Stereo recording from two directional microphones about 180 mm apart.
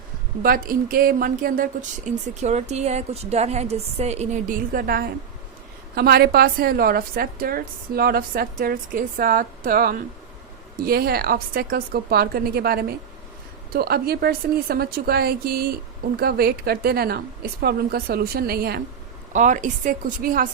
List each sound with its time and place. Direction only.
0.4 s a woman's voice: 50° right (ahead or behind)
19.3 s speech: 45° right (ahead or behind)